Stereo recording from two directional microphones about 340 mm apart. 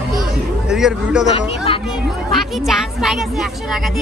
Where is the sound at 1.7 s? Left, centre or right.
Centre.